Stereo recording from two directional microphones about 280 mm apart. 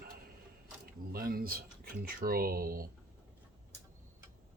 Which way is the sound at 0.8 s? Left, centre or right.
Right.